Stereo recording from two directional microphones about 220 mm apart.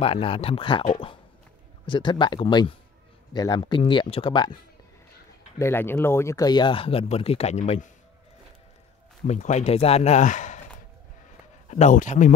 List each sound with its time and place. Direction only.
0.0 s speech: 25° left (ahead or behind)
1.9 s speech: 20° left (ahead or behind)
5.6 s speech: 10° left (ahead or behind); by 7.9 s 30° left (ahead or behind)
9.2 s speech: 35° left (ahead or behind)
11.7 s speech: 35° left (ahead or behind)